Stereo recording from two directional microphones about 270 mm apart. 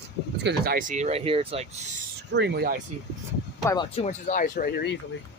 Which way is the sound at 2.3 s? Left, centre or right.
Right.